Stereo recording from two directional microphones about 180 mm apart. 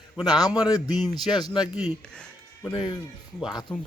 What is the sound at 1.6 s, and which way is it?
Speech, 5° right (ahead or behind).